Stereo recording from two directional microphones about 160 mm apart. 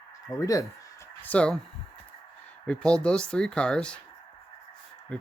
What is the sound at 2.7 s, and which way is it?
Speech, 5° left (ahead or behind).